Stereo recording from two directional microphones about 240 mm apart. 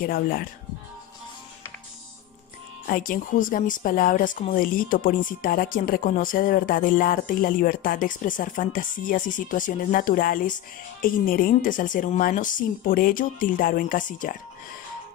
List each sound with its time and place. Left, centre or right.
0.0 s speech: left
2.9 s speech: left